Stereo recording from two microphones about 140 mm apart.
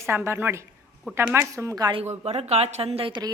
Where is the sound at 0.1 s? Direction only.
15° right (ahead or behind).